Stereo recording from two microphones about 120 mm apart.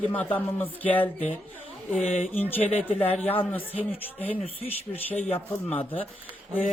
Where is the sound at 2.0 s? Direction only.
65° left (ahead or behind).